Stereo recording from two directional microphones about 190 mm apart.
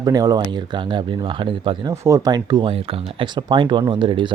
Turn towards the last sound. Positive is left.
turn(degrees=-25)  # may be behind; listen again after turning